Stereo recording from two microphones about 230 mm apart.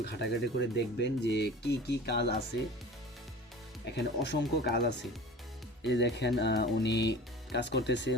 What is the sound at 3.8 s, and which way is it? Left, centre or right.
Speech, left.